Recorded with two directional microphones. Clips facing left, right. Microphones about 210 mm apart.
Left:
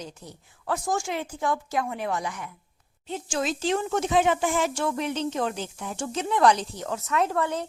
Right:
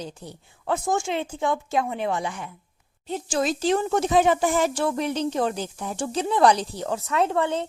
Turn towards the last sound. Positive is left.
turn(degrees=-25)  # may be behind; listen again after turning